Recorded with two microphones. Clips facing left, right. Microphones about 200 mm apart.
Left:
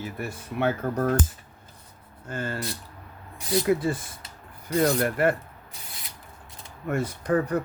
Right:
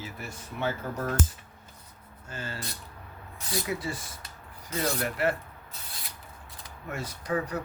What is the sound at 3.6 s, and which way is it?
Speech, 55° left (ahead or behind).